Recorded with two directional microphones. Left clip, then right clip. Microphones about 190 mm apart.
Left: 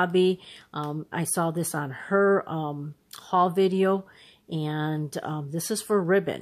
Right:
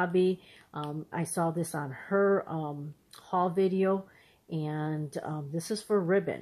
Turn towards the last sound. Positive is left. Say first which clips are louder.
# left 4 dB
turn(degrees=30)  # may be behind; listen again after turning